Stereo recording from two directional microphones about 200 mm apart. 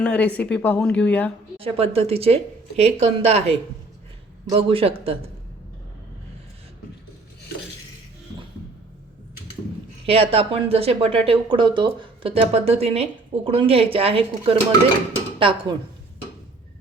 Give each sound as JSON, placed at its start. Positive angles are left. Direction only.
{"t": 0.0, "sound": "speech", "side_deg": 5}
{"t": 1.5, "sound": "speech", "side_deg": -30}
{"t": 4.5, "sound": "speech", "side_deg": -30}
{"t": 10.1, "sound": "speech", "side_deg": -30}